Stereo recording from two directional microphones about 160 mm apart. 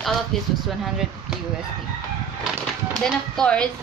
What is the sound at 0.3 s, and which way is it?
Speech, centre (ahead or behind).